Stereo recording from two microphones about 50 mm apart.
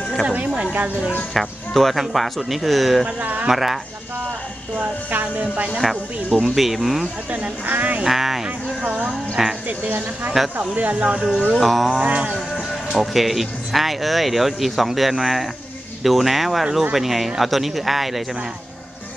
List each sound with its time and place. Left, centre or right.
1.3 s speech: centre
3.2 s speech: right
3.4 s speech: centre
4.7 s speech: right
5.8 s speech: centre
7.2 s speech: right
8.0 s speech: centre
8.8 s speech: centre
9.7 s speech: right
11.1 s speech: centre
12.0 s speech: right
12.5 s speech: centre